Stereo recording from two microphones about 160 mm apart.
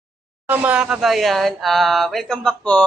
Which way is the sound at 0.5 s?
10° right (ahead or behind).